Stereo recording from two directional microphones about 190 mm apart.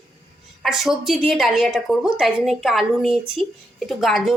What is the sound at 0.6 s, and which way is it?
A woman's voice, centre (ahead or behind).